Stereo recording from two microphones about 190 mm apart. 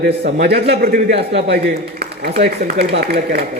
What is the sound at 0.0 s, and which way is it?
A man's voice, 50° right (ahead or behind).